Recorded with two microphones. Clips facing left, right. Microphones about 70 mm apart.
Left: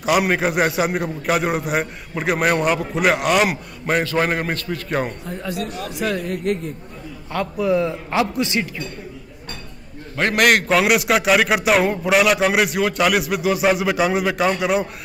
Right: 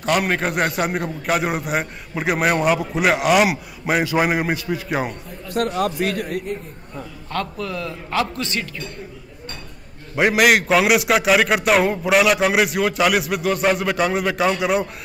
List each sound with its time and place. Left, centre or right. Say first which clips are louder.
0.0 s a man's voice: left 2 dB; centre
5.5 s a man's voice: right 8 dB; right
6.5 s a man's voice: left 6 dB; left
7.3 s a man's voice: left 7 dB; centre
10.1 s a man's voice: right 1 dB; centre